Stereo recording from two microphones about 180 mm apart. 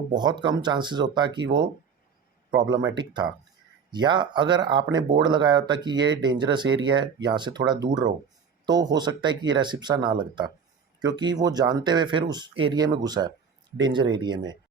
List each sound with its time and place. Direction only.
0.1 s speech: 25° right (ahead or behind)